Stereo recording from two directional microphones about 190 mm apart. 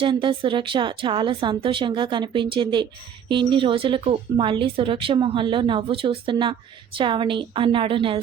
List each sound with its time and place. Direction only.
0.0 s speech: 25° right (ahead or behind)